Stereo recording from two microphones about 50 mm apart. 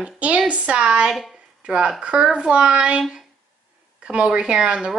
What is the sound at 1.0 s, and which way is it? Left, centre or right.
Speech, centre.